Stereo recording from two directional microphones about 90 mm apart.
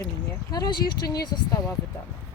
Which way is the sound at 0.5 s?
50° left (ahead or behind).